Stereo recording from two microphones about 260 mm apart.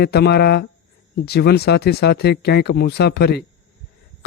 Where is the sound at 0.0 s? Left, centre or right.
Left.